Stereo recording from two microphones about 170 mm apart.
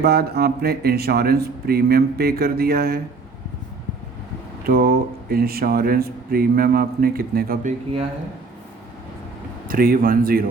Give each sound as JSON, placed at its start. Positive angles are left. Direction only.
{"t": 0.0, "sound": "speech", "side_deg": -65}
{"t": 4.6, "sound": "speech", "side_deg": -60}
{"t": 9.6, "sound": "speech", "side_deg": -55}